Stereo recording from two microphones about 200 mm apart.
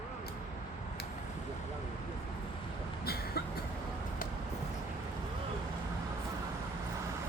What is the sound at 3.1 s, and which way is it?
Cough, 50° left (ahead or behind).